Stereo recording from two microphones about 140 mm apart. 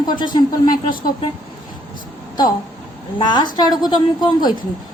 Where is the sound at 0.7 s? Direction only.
85° left.